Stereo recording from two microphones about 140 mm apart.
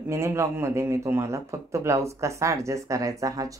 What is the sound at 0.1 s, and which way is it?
Speech, 20° right (ahead or behind).